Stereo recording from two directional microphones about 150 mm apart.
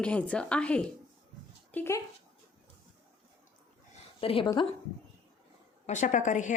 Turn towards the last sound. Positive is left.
turn(degrees=55)  # may be behind; listen again after turning